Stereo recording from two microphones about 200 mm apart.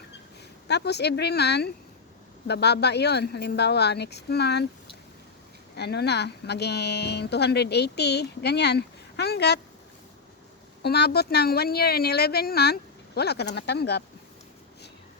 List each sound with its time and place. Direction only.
0.7 s speech: 55° left (ahead or behind)
5.7 s speech: 55° left (ahead or behind)
10.8 s speech: 55° left (ahead or behind)